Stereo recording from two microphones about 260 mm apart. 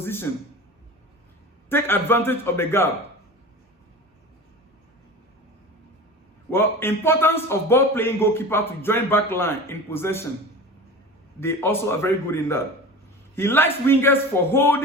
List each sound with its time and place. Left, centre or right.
0.0 s a sound: centre
1.7 s a man's voice: centre
6.5 s a man's voice: centre
11.3 s a man's voice: centre